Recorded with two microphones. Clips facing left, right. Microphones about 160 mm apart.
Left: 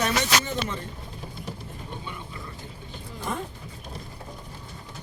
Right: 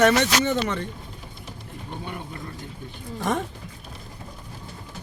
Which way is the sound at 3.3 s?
85° right.